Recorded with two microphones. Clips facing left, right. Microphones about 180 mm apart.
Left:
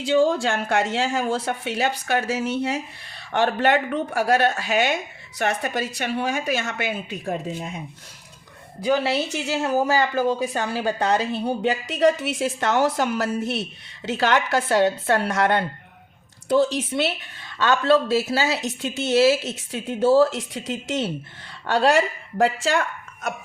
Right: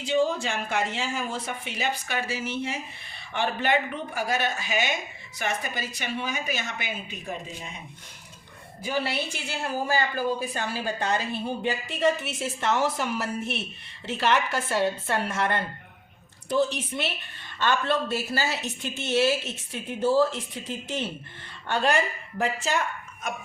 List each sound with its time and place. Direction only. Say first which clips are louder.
0.0 s a woman's voice: left 6 dB; 90° left; by 7.7 s 65° left (ahead or behind)
9.5 s a woman's voice: left 7 dB; 75° left (ahead or behind)
11.6 s speech: left 5 dB; 85° left
16.9 s a woman's voice: left 7 dB; 75° left (ahead or behind)